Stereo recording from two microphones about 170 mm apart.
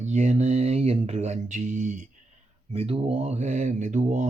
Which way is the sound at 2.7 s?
35° right (ahead or behind).